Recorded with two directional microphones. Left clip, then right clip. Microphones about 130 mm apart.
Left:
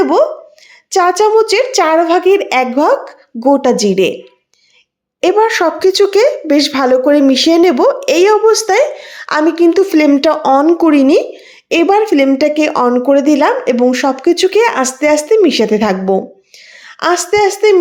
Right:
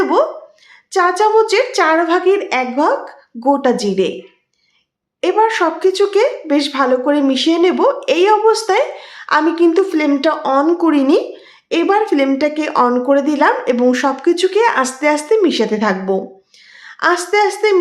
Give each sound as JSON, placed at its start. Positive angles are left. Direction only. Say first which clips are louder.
{"t": 0.0, "sound": "a sound", "louder": "left 4 dB", "side_deg": 35}
{"t": 0.9, "sound": "a woman's voice", "louder": "left 3 dB", "side_deg": 35}
{"t": 2.5, "sound": "a woman's voice", "louder": "left 4 dB", "side_deg": 50}
{"t": 5.2, "sound": "a woman's voice", "louder": "left 3 dB", "side_deg": 35}
{"t": 9.9, "sound": "a woman's voice", "louder": "left 5 dB", "side_deg": 45}
{"t": 10.7, "sound": "a woman's voice", "louder": "left 4 dB", "side_deg": 35}